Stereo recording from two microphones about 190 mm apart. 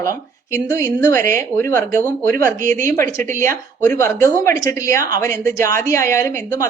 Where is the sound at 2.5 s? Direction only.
45° right (ahead or behind).